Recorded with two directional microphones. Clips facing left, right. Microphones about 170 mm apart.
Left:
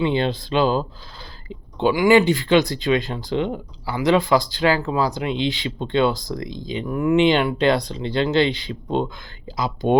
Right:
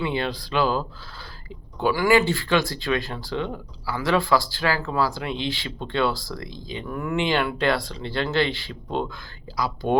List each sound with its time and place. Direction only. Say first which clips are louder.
0.0 s speech: left 5 dB; 25° left (ahead or behind)